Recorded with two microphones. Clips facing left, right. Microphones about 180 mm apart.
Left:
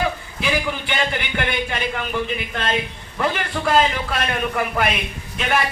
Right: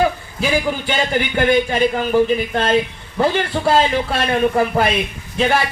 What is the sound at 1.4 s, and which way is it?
A man's voice, 40° right (ahead or behind).